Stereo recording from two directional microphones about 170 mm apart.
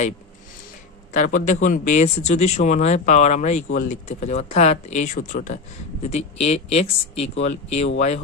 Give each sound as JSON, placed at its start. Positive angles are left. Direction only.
{"t": 1.1, "sound": "speech", "side_deg": 50}